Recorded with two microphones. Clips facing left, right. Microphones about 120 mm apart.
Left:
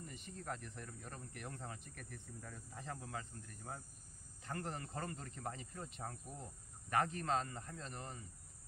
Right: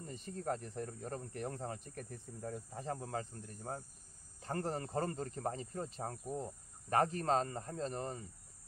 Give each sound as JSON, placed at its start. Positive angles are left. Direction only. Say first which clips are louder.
{"t": 0.0, "sound": "speech", "louder": "right 7 dB", "side_deg": -35}